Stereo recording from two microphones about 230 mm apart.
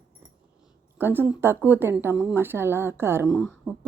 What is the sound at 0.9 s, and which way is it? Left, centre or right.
Speech, centre.